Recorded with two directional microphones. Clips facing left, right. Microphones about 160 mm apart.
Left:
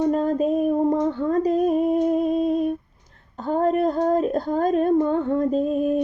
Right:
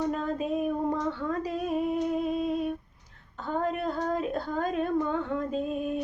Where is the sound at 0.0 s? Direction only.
40° left (ahead or behind).